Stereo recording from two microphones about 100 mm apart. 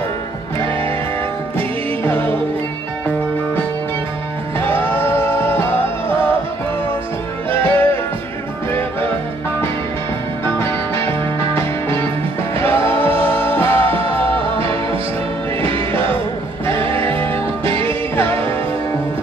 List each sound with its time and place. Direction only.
2.0 s music: 20° left (ahead or behind)
4.6 s music: 20° left (ahead or behind)
7.5 s music: 20° left (ahead or behind)
10.6 s music: 25° left (ahead or behind)
14.6 s music: 65° right (ahead or behind)
16.6 s music: 25° left (ahead or behind)